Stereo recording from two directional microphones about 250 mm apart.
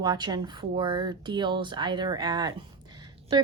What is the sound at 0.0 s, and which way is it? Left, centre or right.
Speech, centre.